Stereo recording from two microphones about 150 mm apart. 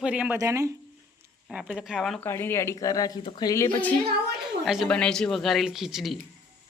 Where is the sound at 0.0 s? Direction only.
10° right (ahead or behind).